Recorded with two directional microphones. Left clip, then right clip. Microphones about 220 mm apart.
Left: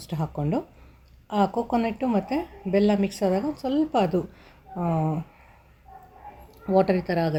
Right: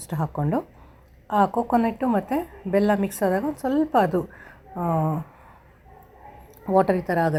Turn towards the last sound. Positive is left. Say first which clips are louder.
# right 2 dB
turn(degrees=-5)  # may be behind; listen again after turning